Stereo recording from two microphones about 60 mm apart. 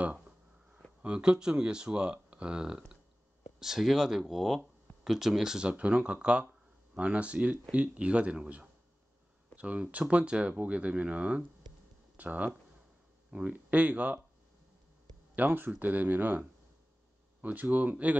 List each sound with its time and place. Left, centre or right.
1.0 s speech: centre
5.7 s speech: right
15.3 s speech: right